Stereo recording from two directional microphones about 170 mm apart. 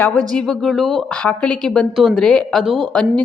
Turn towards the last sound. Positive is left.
turn(degrees=5)  # may be behind; listen again after turning